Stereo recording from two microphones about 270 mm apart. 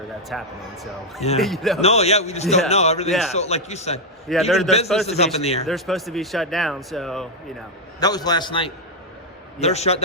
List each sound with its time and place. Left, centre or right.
0.3 s speech: centre
1.8 s a man's voice: left
4.3 s speech: centre
5.0 s a man's voice: left
5.6 s speech: centre
7.9 s a man's voice: centre